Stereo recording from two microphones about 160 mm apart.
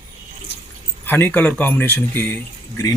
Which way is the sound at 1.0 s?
10° left (ahead or behind).